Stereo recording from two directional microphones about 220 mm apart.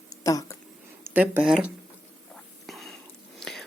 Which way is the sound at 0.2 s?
15° left (ahead or behind).